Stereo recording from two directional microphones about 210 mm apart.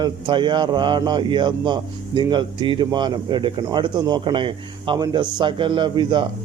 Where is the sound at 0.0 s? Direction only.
20° right (ahead or behind).